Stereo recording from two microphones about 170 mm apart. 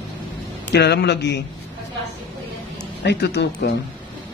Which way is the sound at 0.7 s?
80° left.